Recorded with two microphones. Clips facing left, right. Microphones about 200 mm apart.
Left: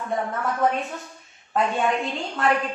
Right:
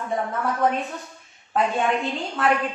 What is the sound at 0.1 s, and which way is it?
A woman's voice, centre (ahead or behind).